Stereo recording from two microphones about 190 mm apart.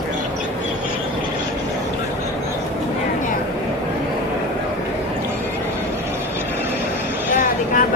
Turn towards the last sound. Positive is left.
turn(degrees=40)  # may be behind; listen again after turning